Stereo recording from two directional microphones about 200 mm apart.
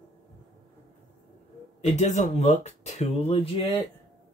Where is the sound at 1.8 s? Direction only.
35° left (ahead or behind).